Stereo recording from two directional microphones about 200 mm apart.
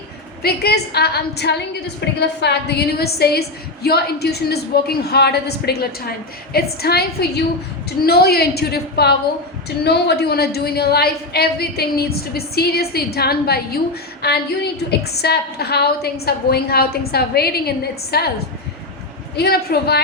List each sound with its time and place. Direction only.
0.4 s a woman's voice: 55° left (ahead or behind)
19.4 s a woman's voice: 50° left (ahead or behind)